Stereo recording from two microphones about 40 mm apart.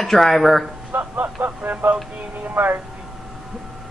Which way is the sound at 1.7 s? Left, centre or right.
Right.